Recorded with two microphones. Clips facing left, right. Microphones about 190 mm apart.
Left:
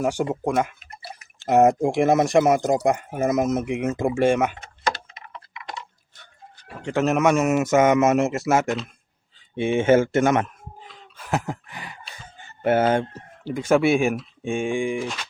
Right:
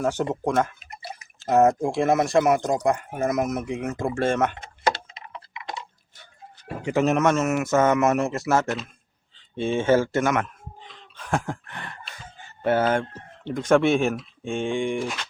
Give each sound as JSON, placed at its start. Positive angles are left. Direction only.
{"t": 0.0, "sound": "speech", "side_deg": 10}
{"t": 0.9, "sound": "drip", "side_deg": -15}
{"t": 1.5, "sound": "speech", "side_deg": 20}
{"t": 4.1, "sound": "speech", "side_deg": 10}
{"t": 5.3, "sound": "a sound", "side_deg": -20}
{"t": 6.8, "sound": "speech", "side_deg": 0}
{"t": 10.8, "sound": "a sound", "side_deg": 5}
{"t": 12.6, "sound": "speech", "side_deg": 20}
{"t": 13.4, "sound": "speech", "side_deg": 10}